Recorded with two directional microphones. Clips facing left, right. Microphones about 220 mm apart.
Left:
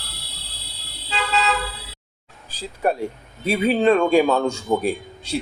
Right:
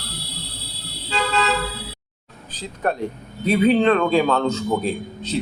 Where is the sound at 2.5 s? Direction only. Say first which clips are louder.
Left 2 dB; 10° left (ahead or behind).